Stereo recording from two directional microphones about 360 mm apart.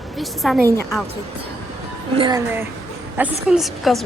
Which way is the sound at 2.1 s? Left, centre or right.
Centre.